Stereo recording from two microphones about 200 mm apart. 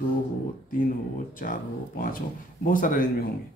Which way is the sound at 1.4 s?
45° left (ahead or behind).